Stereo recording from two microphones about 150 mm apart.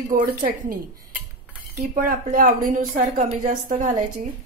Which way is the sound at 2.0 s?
65° right (ahead or behind).